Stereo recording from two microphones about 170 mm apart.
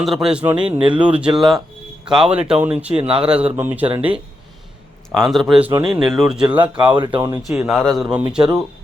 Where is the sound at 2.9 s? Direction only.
35° right (ahead or behind).